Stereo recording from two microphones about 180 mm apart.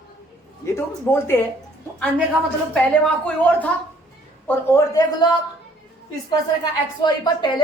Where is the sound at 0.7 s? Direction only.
15° left (ahead or behind).